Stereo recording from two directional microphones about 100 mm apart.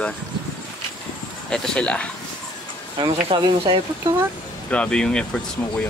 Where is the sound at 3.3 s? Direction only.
60° right (ahead or behind).